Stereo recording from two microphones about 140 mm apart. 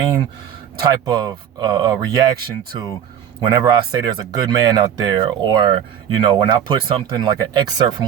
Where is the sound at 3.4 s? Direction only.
30° right (ahead or behind).